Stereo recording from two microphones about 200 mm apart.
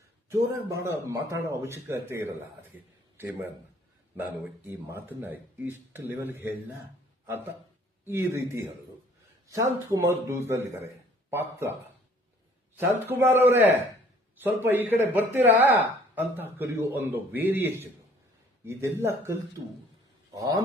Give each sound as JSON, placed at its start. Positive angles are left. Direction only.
{"t": 0.3, "sound": "speech", "side_deg": -15}
{"t": 4.2, "sound": "speech", "side_deg": -10}
{"t": 8.0, "sound": "speech", "side_deg": -15}
{"t": 9.9, "sound": "speech", "side_deg": -15}
{"t": 12.8, "sound": "a man's voice", "side_deg": -10}